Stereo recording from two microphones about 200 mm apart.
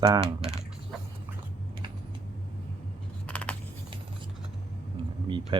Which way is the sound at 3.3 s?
5° left (ahead or behind).